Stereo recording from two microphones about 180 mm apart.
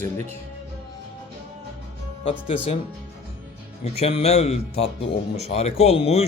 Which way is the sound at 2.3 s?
30° left (ahead or behind).